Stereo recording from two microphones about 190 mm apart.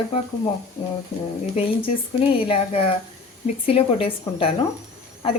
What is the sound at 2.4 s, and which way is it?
A woman's voice, 30° left (ahead or behind).